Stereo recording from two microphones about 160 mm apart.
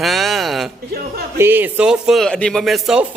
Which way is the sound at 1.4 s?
15° right (ahead or behind).